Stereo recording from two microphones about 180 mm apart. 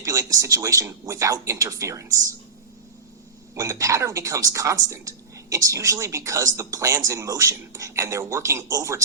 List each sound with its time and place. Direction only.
0.0 s a woman's voice: 20° right (ahead or behind)
3.5 s a woman's voice: 15° right (ahead or behind)